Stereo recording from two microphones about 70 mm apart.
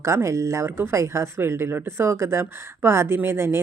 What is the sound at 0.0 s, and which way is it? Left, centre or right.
Speech, right.